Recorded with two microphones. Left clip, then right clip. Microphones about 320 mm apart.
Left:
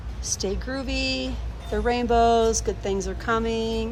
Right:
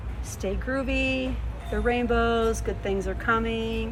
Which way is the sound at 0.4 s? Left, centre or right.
Left.